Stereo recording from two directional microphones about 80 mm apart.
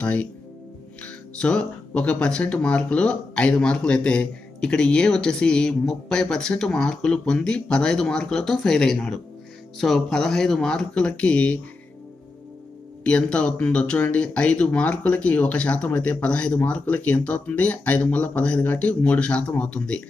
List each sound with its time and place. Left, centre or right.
0.0 s speech: centre
13.0 s speech: centre